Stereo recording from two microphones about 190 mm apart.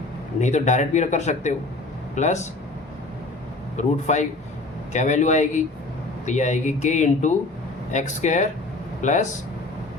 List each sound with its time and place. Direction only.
0.3 s speech: 40° left (ahead or behind)
3.8 s speech: 40° left (ahead or behind)